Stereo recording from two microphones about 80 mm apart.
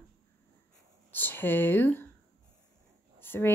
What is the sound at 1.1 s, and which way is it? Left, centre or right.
Speech, left.